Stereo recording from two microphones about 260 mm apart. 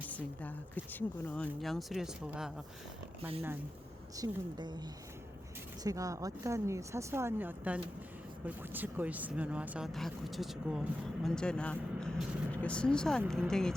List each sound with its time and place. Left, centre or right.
0.0 s a woman's voice: centre
4.2 s speech: centre
5.8 s speech: centre